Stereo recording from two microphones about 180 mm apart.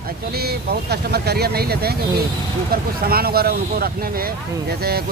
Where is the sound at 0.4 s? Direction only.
60° right (ahead or behind).